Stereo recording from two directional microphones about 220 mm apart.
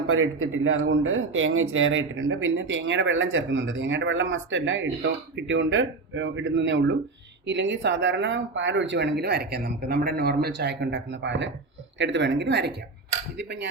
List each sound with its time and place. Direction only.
0.1 s speech: 65° right (ahead or behind); by 13.7 s 50° right (ahead or behind)